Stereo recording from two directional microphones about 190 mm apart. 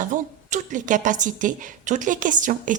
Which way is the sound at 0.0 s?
40° right (ahead or behind).